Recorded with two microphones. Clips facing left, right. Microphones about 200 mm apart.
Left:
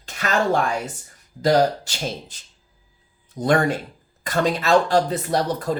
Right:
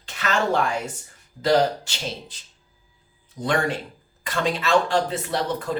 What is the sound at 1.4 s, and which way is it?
Speech, 40° left (ahead or behind).